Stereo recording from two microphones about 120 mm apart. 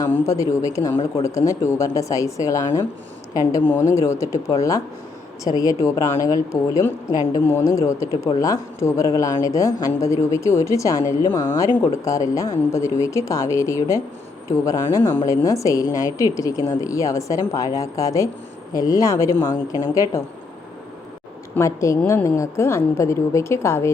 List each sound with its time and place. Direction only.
0.1 s a woman's voice: 25° left (ahead or behind)
21.5 s a woman's voice: 25° left (ahead or behind)